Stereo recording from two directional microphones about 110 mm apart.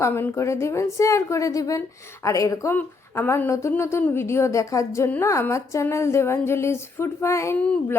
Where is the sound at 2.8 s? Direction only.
20° left (ahead or behind).